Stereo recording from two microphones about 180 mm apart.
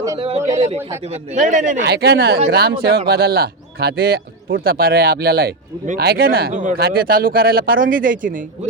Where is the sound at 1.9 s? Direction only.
65° right (ahead or behind).